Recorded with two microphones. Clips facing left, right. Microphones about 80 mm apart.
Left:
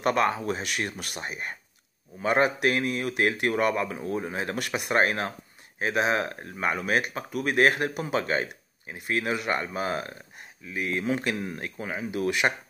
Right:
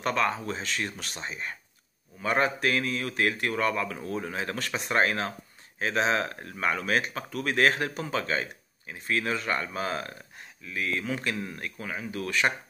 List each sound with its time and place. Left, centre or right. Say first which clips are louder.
0.0 s speech: left 3 dB; centre